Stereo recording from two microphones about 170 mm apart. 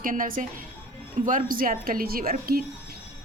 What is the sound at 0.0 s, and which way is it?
A woman's voice, 55° right (ahead or behind).